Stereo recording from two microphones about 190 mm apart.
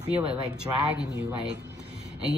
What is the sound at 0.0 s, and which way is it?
Speech, 30° right (ahead or behind).